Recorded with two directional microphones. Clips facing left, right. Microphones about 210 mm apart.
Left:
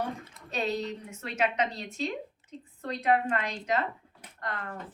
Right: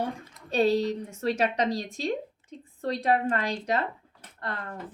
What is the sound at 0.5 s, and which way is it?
Speech, 30° right (ahead or behind).